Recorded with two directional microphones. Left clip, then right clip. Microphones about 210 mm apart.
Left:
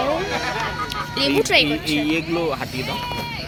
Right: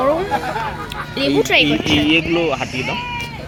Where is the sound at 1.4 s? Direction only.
10° right (ahead or behind).